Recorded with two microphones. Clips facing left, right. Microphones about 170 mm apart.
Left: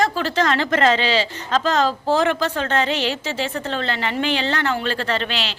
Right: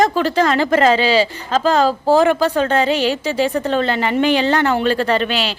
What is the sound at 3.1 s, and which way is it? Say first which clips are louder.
Speech: right 7 dB; 40° right (ahead or behind).